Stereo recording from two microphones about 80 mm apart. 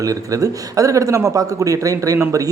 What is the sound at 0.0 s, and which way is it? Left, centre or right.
A man's voice, right.